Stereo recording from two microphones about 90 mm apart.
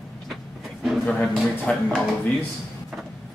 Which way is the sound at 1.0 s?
5° left (ahead or behind).